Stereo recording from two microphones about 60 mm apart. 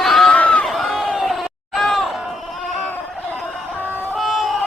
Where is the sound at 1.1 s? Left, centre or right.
Centre.